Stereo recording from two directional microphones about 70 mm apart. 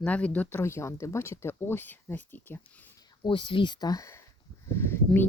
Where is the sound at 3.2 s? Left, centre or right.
Left.